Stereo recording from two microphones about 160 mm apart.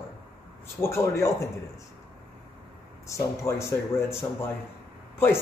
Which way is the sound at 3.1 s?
20° left (ahead or behind).